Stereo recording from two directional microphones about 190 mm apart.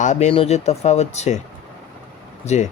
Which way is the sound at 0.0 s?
40° left (ahead or behind).